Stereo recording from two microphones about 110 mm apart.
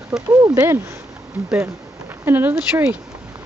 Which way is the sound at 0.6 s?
25° right (ahead or behind).